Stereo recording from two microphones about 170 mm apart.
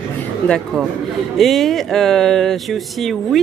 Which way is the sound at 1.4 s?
Centre (ahead or behind).